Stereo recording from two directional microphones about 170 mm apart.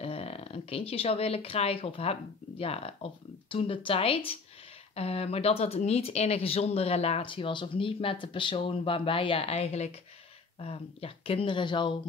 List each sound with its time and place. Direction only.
0.0 s speech: 35° left (ahead or behind)